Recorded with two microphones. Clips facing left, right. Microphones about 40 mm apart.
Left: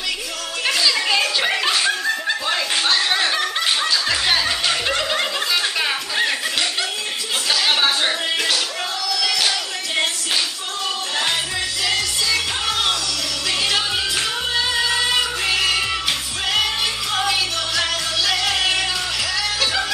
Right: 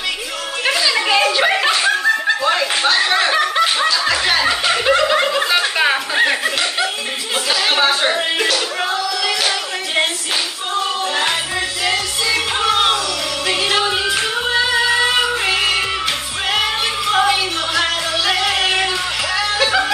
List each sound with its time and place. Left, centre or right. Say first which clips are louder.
0.7 s snicker: right 3 dB; centre
3.7 s music: right 4 dB; centre
5.6 s chuckle: right 5 dB; centre
7.4 s music: right 3 dB; centre
11.8 s music: right 2 dB; centre